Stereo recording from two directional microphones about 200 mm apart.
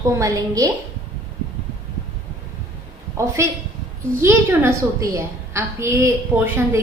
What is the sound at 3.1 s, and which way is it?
A woman's voice, 15° right (ahead or behind).